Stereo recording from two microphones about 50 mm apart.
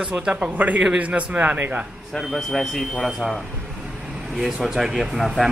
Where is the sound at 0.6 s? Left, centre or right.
Right.